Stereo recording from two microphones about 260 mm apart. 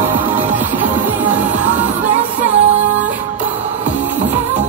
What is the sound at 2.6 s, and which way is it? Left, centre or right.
Music, right.